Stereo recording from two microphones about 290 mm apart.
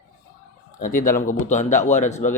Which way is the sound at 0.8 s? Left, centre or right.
Left.